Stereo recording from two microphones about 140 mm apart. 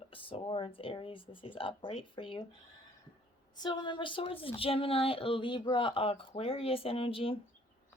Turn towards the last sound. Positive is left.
turn(degrees=40)  # may be behind; listen again after turning